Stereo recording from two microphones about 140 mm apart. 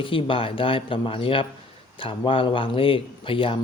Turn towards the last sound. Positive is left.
turn(degrees=40)  # may be behind; listen again after turning